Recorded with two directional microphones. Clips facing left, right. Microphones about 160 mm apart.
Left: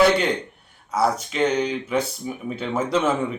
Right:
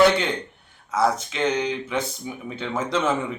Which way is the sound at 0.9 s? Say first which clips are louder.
Even; 10° left (ahead or behind).